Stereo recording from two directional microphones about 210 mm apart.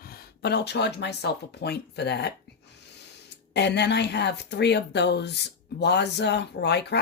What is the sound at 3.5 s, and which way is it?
Speech, 55° left (ahead or behind).